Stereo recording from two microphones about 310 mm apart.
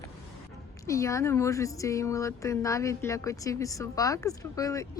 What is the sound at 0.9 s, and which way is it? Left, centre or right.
A woman's voice, centre.